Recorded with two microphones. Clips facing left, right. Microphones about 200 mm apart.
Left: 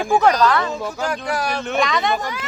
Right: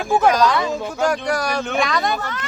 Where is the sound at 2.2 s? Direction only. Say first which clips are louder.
Left 1 dB; 10° left (ahead or behind).